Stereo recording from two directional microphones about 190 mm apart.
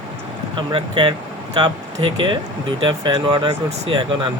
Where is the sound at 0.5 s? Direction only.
25° right (ahead or behind).